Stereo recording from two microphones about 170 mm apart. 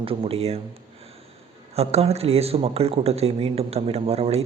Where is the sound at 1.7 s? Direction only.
40° right (ahead or behind).